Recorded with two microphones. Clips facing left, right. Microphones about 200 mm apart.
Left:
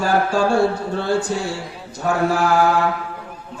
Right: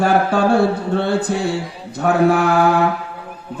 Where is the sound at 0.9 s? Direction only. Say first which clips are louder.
Right 2 dB; 60° right (ahead or behind).